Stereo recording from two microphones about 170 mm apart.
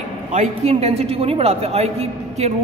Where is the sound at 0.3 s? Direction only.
40° right (ahead or behind).